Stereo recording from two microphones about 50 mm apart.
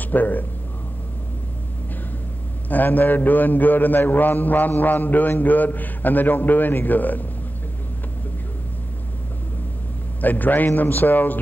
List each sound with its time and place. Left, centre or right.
0.0 s speech: left
2.7 s a man's voice: left
10.2 s a man's voice: left